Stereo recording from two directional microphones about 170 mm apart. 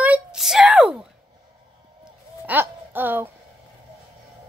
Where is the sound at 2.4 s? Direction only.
10° right (ahead or behind).